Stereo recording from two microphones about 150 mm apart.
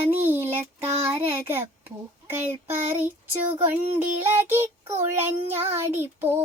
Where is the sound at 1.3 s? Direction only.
15° right (ahead or behind).